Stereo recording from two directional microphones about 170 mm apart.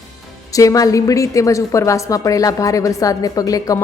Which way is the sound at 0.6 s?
20° left (ahead or behind).